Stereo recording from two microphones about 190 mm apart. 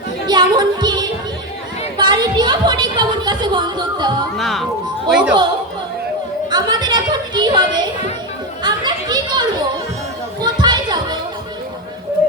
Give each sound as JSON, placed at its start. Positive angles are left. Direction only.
{"t": 0.3, "sound": "music", "side_deg": -20}
{"t": 2.0, "sound": "a sound", "side_deg": -20}
{"t": 4.4, "sound": "speech", "side_deg": 0}
{"t": 6.5, "sound": "a woman's voice", "side_deg": -20}
{"t": 8.6, "sound": "a sound", "side_deg": -20}
{"t": 10.4, "sound": "children playing", "side_deg": -20}